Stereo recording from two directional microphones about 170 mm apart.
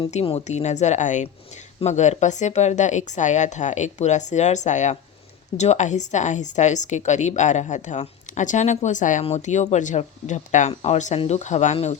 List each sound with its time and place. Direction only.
0.0 s a woman's voice: 35° left (ahead or behind)